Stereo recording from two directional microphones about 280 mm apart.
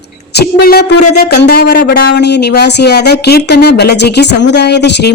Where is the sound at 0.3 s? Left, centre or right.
Left.